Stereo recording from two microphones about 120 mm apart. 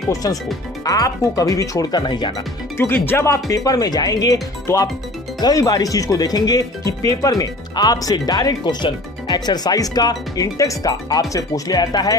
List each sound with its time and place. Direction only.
0.1 s speech: 30° left (ahead or behind)
2.8 s speech: 20° left (ahead or behind)